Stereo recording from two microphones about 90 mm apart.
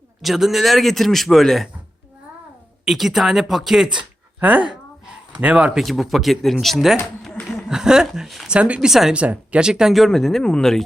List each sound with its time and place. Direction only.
0.2 s speech: 5° right (ahead or behind)
2.8 s speech: 5° right (ahead or behind)
3.9 s speech: 20° right (ahead or behind)
5.8 s speech: centre (ahead or behind)
7.4 s chuckle: 5° right (ahead or behind)
8.5 s speech: 15° right (ahead or behind)
9.2 s speech: 15° right (ahead or behind); by 10.8 s 5° left (ahead or behind)